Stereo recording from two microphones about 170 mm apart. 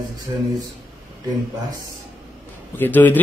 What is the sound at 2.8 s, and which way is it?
Speech, 10° left (ahead or behind).